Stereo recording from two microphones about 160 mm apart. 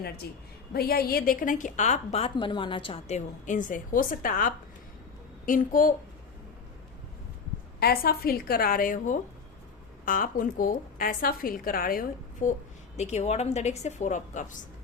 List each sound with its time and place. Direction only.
0.2 s a woman's voice: 80° left; by 5.9 s 60° left (ahead or behind)
7.8 s a woman's voice: 75° left (ahead or behind); by 12.5 s 60° left (ahead or behind)
13.0 s a woman's voice: 45° left (ahead or behind)